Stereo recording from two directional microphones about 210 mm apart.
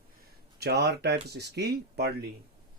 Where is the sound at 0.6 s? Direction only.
50° right (ahead or behind).